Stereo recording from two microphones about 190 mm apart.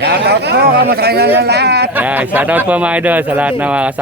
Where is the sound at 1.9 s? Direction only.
10° right (ahead or behind).